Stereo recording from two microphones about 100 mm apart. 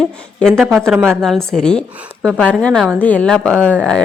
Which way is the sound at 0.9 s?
20° right (ahead or behind).